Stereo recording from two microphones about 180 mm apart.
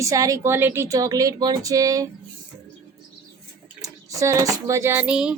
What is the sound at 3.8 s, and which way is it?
Speech, 20° right (ahead or behind).